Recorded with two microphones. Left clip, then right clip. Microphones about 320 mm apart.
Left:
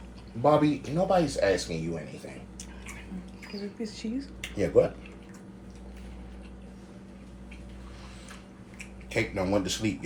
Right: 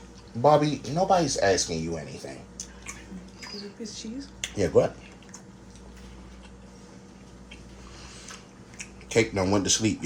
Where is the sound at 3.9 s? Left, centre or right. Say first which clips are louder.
Left 2 dB; left.